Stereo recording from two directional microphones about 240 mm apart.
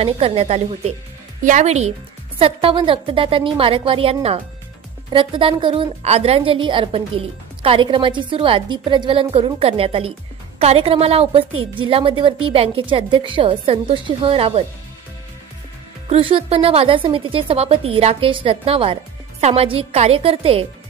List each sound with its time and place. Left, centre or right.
0.0 s a woman's voice: right
16.1 s a woman's voice: right